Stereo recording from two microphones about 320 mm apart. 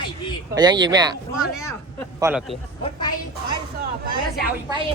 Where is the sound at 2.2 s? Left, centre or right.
Centre.